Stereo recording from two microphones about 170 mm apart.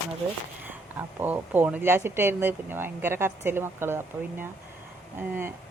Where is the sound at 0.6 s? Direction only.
10° right (ahead or behind).